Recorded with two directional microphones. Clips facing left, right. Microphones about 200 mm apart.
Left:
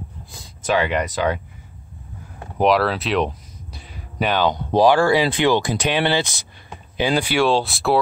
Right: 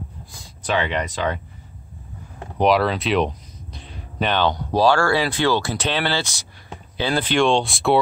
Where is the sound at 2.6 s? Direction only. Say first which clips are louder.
Even; centre (ahead or behind).